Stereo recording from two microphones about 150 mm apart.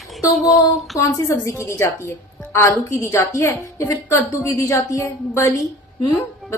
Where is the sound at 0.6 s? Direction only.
25° left (ahead or behind).